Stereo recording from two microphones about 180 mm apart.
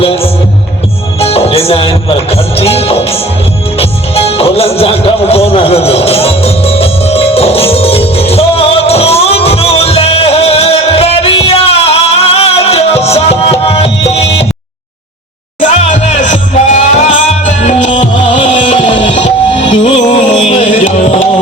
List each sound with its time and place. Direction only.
1.2 s music: 35° left (ahead or behind)
15.6 s music: 45° left (ahead or behind)
17.9 s music: 30° left (ahead or behind)
18.5 s music: 45° left (ahead or behind)